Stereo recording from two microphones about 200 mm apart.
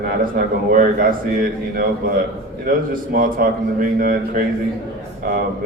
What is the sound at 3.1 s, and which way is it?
A man's voice, 45° right (ahead or behind).